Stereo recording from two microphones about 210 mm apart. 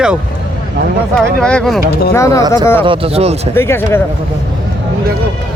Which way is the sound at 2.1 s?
15° left (ahead or behind).